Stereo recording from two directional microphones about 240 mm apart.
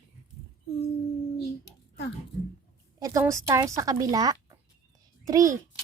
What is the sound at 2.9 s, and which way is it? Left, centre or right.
A woman's voice, centre.